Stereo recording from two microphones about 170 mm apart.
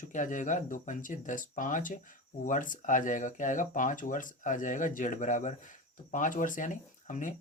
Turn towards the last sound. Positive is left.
turn(degrees=50)  # may be behind; listen again after turning